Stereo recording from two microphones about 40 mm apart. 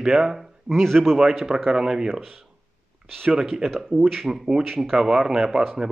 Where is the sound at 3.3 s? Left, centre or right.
Centre.